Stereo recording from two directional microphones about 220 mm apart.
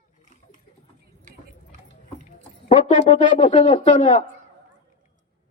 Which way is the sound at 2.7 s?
30° left (ahead or behind).